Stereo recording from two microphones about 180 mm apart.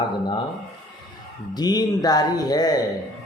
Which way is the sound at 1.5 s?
20° left (ahead or behind).